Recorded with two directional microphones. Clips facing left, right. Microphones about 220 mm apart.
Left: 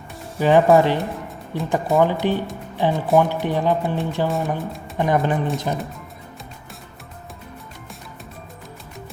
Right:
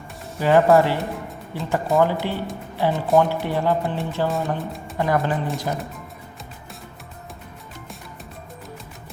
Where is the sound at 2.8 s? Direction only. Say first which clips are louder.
Left 1 dB; 20° left (ahead or behind).